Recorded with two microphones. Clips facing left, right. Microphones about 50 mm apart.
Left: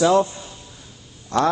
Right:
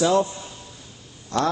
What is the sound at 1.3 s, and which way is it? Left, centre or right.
Speech, left.